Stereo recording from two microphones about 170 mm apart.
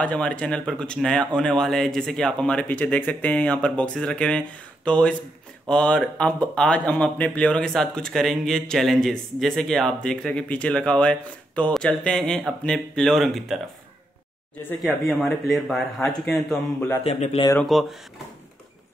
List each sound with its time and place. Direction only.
0.0 s speech: 5° left (ahead or behind)
14.8 s speech: centre (ahead or behind)
17.0 s speech: 40° left (ahead or behind)
17.6 s speech: centre (ahead or behind)